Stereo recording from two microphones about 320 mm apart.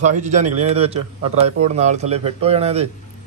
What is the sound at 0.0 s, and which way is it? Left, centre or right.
A man's voice, right.